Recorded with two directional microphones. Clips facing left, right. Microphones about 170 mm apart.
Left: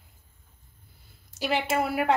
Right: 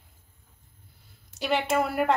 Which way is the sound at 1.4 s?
Centre (ahead or behind).